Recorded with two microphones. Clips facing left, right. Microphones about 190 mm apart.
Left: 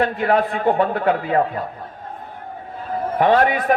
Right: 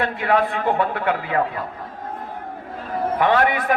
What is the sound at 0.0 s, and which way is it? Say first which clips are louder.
A man's voice: left 2 dB; 40° left (ahead or behind).